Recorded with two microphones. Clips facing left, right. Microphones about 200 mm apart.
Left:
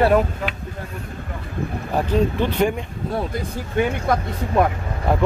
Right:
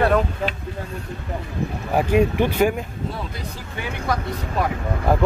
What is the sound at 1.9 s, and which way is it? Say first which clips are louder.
Speech: right 2 dB; 15° right (ahead or behind).